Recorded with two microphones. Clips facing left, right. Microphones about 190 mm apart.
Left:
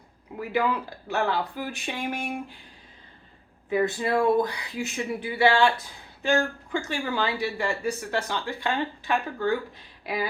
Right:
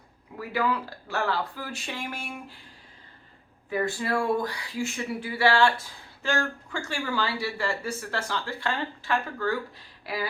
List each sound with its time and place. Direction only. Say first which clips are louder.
0.3 s speech: left 2 dB; 20° left (ahead or behind)
3.7 s speech: left 3 dB; 20° left (ahead or behind)